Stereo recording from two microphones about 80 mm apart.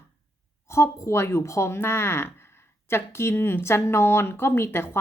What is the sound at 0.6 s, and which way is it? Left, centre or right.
Speech, left.